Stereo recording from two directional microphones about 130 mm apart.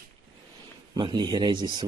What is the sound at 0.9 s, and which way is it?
Speech, 35° right (ahead or behind).